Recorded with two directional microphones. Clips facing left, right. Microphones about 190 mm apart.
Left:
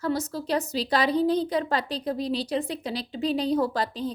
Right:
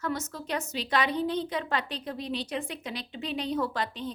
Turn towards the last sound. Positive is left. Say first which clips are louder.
# left 5 dB
turn(degrees=35)  # may be behind; listen again after turning